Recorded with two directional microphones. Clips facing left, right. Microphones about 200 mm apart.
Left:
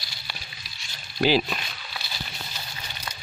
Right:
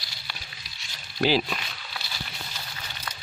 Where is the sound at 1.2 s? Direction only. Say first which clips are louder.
Left 2 dB; 5° left (ahead or behind).